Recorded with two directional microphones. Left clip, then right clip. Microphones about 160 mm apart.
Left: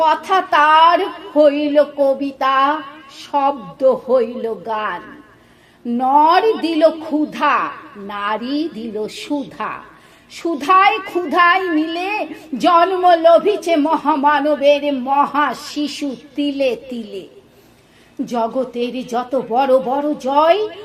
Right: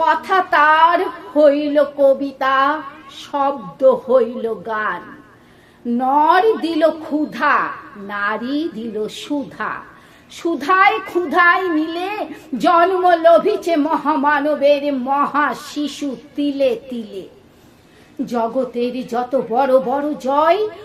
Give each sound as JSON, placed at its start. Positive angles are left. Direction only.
{"t": 0.0, "sound": "speech", "side_deg": 30}
{"t": 6.0, "sound": "a woman's voice", "side_deg": 30}
{"t": 18.3, "sound": "speech", "side_deg": 35}